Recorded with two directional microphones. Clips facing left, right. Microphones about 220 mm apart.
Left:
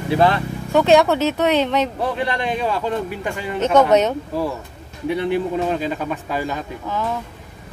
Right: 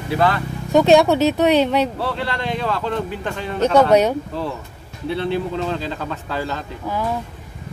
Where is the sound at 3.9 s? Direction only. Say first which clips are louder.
Right 1 dB; 10° right (ahead or behind).